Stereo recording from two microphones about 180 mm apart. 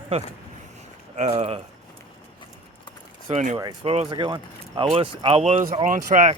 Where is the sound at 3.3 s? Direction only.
40° right (ahead or behind).